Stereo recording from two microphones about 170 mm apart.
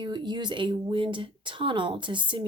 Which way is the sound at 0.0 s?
25° right (ahead or behind).